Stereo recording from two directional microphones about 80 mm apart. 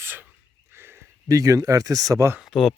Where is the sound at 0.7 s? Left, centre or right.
Right.